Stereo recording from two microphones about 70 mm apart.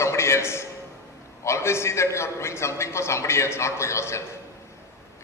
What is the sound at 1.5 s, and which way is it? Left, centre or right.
A man's voice, left.